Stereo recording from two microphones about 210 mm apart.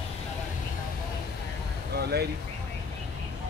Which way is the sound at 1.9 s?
50° right (ahead or behind).